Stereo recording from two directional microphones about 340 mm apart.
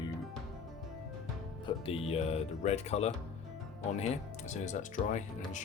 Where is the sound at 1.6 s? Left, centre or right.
Centre.